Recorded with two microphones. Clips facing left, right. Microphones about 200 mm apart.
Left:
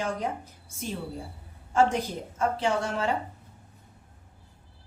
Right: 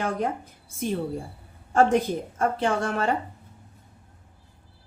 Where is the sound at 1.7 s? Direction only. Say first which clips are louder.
Right 4 dB; 55° right (ahead or behind).